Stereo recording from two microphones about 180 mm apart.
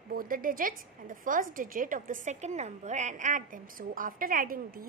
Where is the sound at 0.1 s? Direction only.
50° right (ahead or behind).